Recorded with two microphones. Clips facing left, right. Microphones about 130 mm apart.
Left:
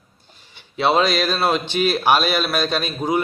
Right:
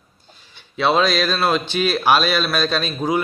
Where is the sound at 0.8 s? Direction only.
20° left (ahead or behind).